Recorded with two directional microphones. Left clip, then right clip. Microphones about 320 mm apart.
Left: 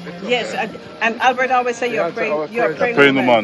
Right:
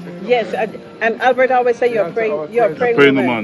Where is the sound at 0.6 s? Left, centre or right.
Right.